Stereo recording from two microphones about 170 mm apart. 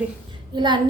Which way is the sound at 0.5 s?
25° right (ahead or behind).